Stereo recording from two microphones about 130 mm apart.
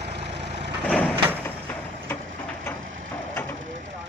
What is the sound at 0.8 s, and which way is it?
Vehicle, 5° left (ahead or behind).